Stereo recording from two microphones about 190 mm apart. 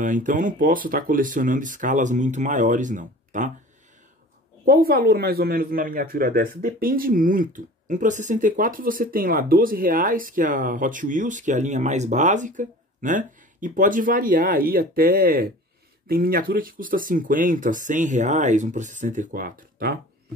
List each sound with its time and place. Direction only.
0.0 s speech: 45° right (ahead or behind)
4.6 s speech: 50° right (ahead or behind)